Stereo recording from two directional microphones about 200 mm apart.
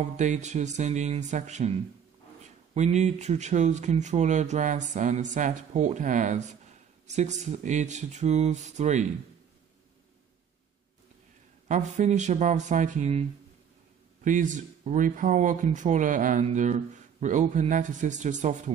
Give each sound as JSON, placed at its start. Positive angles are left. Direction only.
{"t": 0.0, "sound": "speech", "side_deg": -35}
{"t": 11.6, "sound": "speech", "side_deg": -35}
{"t": 14.2, "sound": "speech", "side_deg": -40}